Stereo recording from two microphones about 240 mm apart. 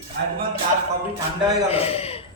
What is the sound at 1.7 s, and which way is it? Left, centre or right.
Speech, left.